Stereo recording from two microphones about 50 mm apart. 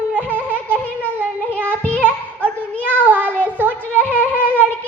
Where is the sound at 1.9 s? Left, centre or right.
Right.